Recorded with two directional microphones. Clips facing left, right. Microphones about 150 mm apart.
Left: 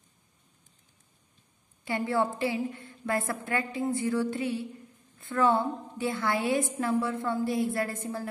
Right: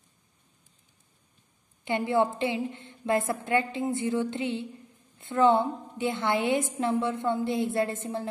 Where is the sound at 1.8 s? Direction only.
20° right (ahead or behind).